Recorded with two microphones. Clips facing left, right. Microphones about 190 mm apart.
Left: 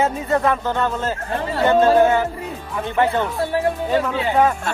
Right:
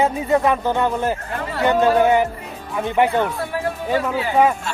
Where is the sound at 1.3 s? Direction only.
25° left (ahead or behind).